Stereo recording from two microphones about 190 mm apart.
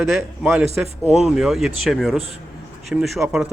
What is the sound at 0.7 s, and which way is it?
Speech, 35° right (ahead or behind).